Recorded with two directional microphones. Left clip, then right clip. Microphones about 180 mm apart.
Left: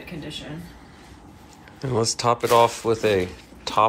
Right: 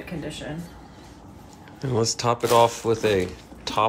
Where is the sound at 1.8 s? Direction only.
15° right (ahead or behind).